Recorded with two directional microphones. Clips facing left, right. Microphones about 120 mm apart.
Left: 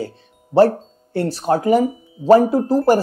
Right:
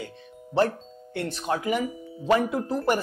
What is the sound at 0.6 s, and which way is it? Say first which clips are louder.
Speech: left 10 dB; 35° left (ahead or behind).